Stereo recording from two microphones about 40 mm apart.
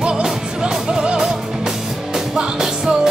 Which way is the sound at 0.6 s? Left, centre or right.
Right.